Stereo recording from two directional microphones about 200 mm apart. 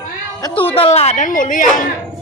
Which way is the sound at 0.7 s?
30° left (ahead or behind).